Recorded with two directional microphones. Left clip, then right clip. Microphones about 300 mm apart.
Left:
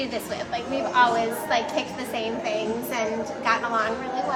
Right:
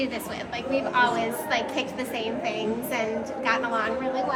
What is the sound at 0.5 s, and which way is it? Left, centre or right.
A woman's voice, centre.